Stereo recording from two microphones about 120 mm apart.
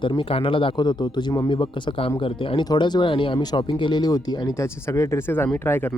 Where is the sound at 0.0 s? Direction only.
45° left (ahead or behind).